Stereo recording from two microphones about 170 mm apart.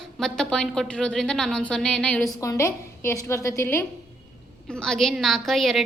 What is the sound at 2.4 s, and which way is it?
A woman's voice, 15° left (ahead or behind).